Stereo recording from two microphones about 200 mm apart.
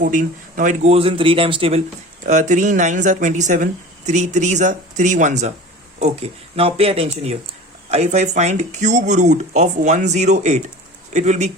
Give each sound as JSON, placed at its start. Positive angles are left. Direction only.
{"t": 0.0, "sound": "speech", "side_deg": -40}
{"t": 2.2, "sound": "speech", "side_deg": -40}